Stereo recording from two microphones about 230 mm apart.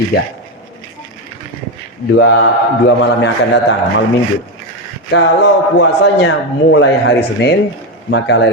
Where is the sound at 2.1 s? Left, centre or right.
Left.